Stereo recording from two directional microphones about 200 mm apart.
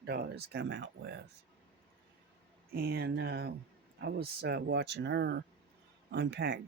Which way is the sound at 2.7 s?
50° right (ahead or behind).